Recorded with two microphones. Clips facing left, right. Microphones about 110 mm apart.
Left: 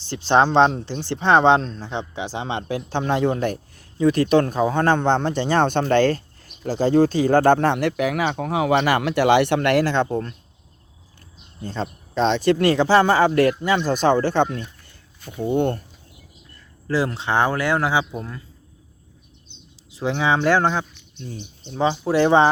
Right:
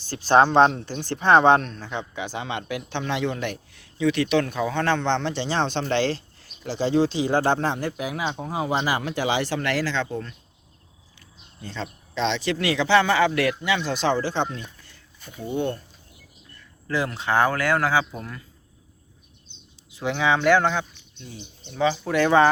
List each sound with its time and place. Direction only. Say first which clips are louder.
0.0 s a man's voice: even; 25° left (ahead or behind); by 10.3 s 45° left (ahead or behind)
11.6 s a man's voice: left 5 dB; 45° left (ahead or behind)
16.8 s speech: left 3 dB; 30° left (ahead or behind)
19.9 s speech: left 2 dB; 30° left (ahead or behind)